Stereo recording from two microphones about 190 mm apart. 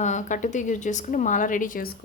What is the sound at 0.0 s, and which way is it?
A woman's voice, 40° left (ahead or behind).